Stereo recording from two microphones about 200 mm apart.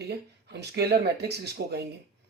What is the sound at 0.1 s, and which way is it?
Speech, 55° right (ahead or behind).